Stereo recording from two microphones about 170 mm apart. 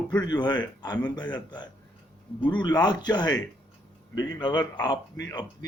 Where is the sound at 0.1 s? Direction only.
25° left (ahead or behind).